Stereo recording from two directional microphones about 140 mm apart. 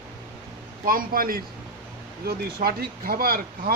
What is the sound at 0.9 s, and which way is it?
Speech, 90° right.